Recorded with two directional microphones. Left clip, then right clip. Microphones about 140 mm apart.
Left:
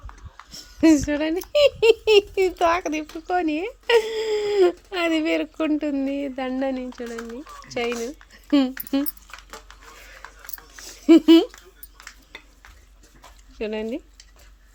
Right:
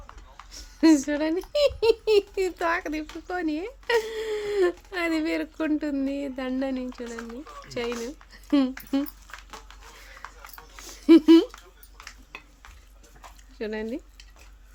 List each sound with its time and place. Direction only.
0.5 s speech: 10° left (ahead or behind)
1.8 s a child's voice: 15° right (ahead or behind)
2.3 s a child's voice: 20° left (ahead or behind); by 9.1 s 5° left (ahead or behind)
11.0 s speech: 5° left (ahead or behind)
13.6 s speech: 15° left (ahead or behind)